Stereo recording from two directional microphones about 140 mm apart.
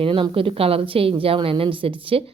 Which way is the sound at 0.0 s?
40° right (ahead or behind).